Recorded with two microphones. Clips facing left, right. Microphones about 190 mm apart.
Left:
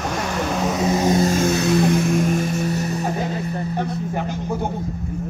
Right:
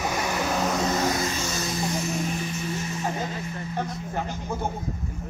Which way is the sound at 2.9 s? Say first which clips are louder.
Left 6 dB; 35° left (ahead or behind).